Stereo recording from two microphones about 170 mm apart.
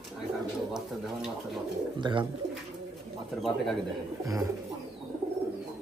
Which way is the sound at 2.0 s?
30° right (ahead or behind).